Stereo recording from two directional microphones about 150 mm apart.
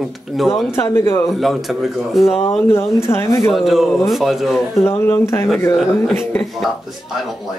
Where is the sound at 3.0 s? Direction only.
20° left (ahead or behind).